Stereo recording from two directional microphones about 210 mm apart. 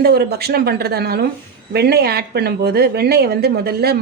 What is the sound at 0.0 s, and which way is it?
A woman's voice, 50° right (ahead or behind).